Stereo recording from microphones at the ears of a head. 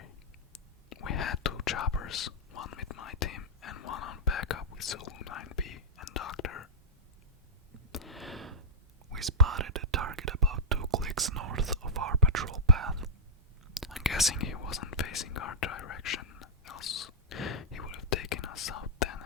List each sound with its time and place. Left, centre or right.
0.5 s whispering: left
9.1 s whispering: right
13.7 s whispering: centre
14.3 s whispering: left